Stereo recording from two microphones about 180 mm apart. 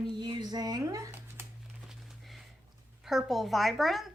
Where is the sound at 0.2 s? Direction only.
25° right (ahead or behind).